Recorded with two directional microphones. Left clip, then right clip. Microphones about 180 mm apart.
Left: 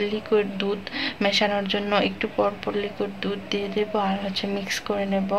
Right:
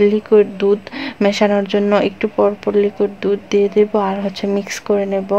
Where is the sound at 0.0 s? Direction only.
50° right (ahead or behind).